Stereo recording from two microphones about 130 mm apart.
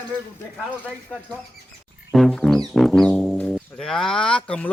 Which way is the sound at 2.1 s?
Centre (ahead or behind).